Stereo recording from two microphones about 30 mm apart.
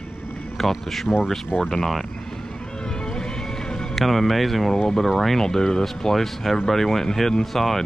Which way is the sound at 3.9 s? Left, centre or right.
Centre.